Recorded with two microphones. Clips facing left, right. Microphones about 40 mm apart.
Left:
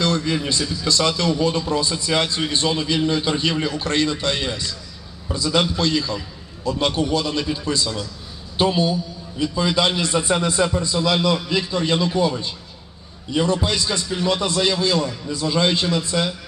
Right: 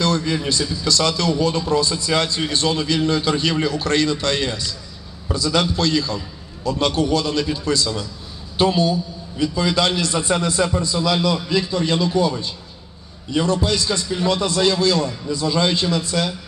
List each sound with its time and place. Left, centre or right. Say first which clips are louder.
0.2 s a man's voice: right 1 dB; centre
15.3 s a man's voice: even; left